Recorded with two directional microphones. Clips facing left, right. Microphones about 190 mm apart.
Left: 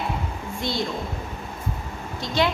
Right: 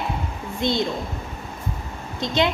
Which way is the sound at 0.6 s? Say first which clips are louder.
Right 5 dB; 20° right (ahead or behind).